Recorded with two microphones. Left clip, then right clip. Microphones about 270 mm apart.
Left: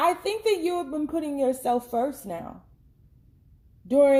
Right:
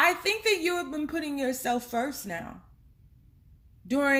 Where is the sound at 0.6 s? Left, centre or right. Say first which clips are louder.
Left 2 dB; right.